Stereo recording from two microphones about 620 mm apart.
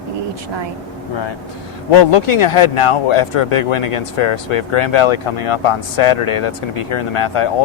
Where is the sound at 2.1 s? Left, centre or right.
Left.